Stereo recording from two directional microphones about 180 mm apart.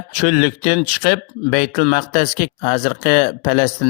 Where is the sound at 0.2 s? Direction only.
45° left (ahead or behind).